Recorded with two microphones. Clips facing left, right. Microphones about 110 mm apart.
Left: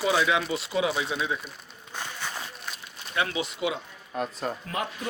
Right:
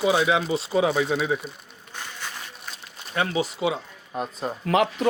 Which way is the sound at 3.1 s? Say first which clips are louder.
Right 4 dB; 35° right (ahead or behind).